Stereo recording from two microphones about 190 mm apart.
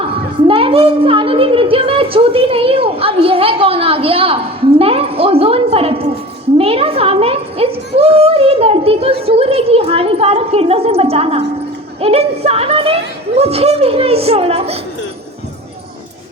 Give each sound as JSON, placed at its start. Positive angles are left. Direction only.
{"t": 0.0, "sound": "a woman's voice", "side_deg": -30}